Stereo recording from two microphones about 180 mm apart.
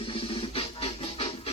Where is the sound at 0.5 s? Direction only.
30° left (ahead or behind).